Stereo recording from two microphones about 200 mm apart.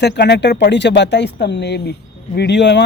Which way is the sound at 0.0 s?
60° left (ahead or behind).